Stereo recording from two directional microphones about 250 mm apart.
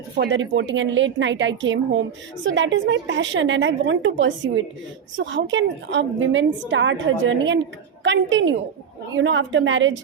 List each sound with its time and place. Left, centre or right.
0.2 s a woman's voice: right